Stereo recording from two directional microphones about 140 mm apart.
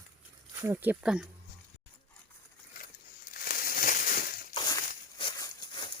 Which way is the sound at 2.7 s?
90° left.